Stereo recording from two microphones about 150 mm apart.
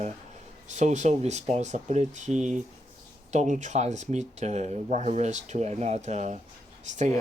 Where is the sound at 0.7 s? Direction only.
50° right (ahead or behind).